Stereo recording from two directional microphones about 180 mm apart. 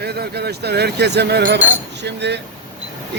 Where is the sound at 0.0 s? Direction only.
65° right (ahead or behind).